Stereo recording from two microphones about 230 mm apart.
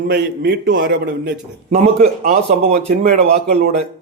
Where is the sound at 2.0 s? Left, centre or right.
Right.